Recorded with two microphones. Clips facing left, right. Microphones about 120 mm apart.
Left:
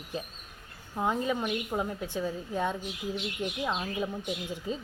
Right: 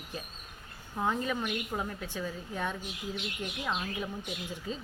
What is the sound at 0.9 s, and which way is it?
Speech, 15° left (ahead or behind).